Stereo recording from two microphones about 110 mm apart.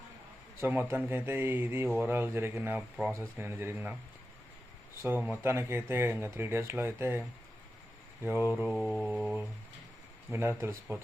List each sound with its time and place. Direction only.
0.6 s speech: 20° right (ahead or behind)
5.0 s speech: 15° right (ahead or behind)
8.7 s mantra: 10° right (ahead or behind)
10.6 s speech: 20° right (ahead or behind)